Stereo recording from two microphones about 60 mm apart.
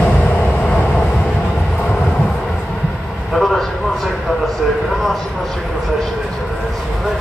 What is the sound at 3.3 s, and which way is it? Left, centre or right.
Vehicle, centre.